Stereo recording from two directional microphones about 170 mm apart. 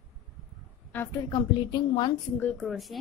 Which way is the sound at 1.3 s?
25° left (ahead or behind).